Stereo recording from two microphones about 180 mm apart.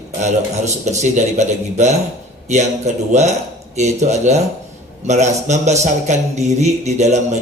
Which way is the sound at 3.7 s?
40° right (ahead or behind).